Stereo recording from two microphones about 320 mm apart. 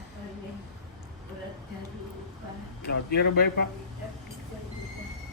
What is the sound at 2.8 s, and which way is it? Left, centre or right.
Speech, left.